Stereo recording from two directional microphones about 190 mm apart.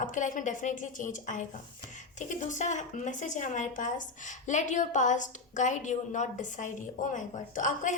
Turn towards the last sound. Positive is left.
turn(degrees=45)  # may be behind; listen again after turning